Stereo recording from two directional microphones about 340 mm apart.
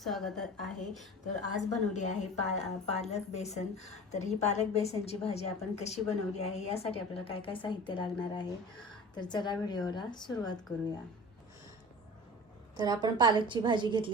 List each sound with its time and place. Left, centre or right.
0.0 s a woman's voice: centre
1.5 s a woman's voice: left
12.7 s a woman's voice: centre